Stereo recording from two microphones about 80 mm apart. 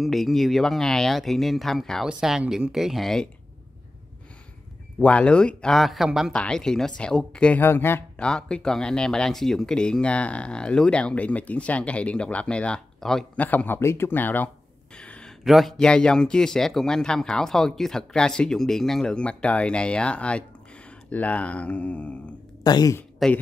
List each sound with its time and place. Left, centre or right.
0.0 s speech: centre
2.0 s speech: centre
5.0 s speech: centre
6.3 s speech: centre
7.6 s speech: left
8.2 s speech: centre
13.4 s speech: left
13.7 s speech: left
15.0 s a sound: centre
15.4 s a man's voice: centre
15.8 s speech: centre
22.6 s speech: left
23.2 s speech: centre